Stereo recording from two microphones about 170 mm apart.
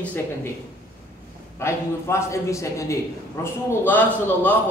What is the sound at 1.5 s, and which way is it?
A man's voice, 15° left (ahead or behind).